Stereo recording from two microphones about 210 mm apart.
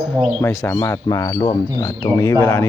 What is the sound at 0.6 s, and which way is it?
Speech, 10° left (ahead or behind).